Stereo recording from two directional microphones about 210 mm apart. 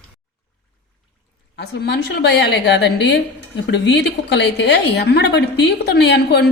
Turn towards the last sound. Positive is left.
turn(degrees=55)  # may be behind; listen again after turning